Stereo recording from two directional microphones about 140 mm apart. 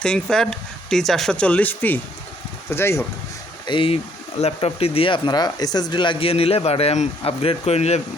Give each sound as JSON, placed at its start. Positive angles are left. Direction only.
{"t": 0.0, "sound": "speech", "side_deg": 5}
{"t": 3.7, "sound": "speech", "side_deg": 40}